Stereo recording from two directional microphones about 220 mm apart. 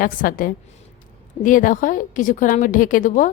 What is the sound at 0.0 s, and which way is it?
A woman's voice, 40° left (ahead or behind).